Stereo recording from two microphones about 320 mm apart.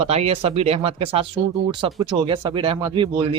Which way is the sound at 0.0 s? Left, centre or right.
Centre.